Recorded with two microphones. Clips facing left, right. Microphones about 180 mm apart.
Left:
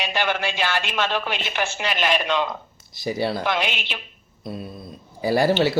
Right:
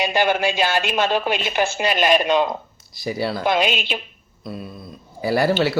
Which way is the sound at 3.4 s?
40° right (ahead or behind).